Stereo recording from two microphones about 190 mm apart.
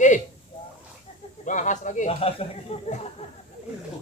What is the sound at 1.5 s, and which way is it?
Speech, 40° left (ahead or behind).